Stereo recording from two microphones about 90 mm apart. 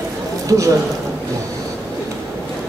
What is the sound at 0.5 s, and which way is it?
Speech, 40° right (ahead or behind).